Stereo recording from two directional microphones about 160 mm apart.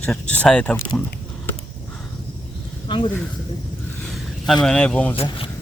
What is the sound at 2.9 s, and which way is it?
Speech, 30° left (ahead or behind).